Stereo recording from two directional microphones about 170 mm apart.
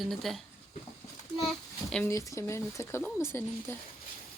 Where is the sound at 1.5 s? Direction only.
5° left (ahead or behind).